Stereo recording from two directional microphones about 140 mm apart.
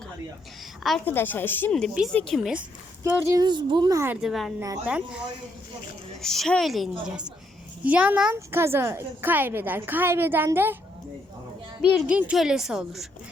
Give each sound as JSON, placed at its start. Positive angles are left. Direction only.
{"t": 1.0, "sound": "speech", "side_deg": 15}
{"t": 3.0, "sound": "speech", "side_deg": -20}
{"t": 3.4, "sound": "speech", "side_deg": -30}
{"t": 4.2, "sound": "a woman's voice", "side_deg": 0}
{"t": 6.2, "sound": "a woman's voice", "side_deg": 5}
{"t": 11.9, "sound": "a woman's voice", "side_deg": -5}